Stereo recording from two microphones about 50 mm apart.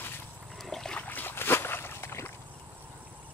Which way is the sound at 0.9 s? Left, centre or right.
Left.